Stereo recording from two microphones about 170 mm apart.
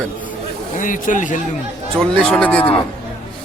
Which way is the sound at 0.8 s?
50° left (ahead or behind).